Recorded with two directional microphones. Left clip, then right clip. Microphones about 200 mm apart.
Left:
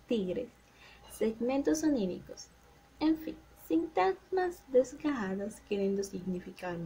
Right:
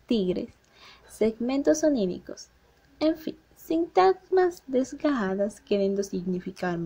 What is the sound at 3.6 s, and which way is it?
A woman's voice, 35° right (ahead or behind).